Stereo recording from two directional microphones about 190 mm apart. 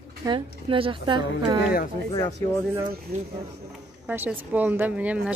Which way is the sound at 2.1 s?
20° left (ahead or behind).